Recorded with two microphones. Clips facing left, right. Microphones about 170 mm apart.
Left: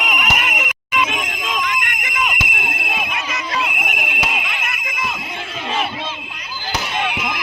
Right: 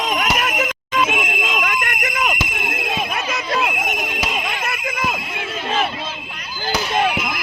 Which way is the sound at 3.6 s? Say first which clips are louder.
Right 1 dB; 45° right (ahead or behind).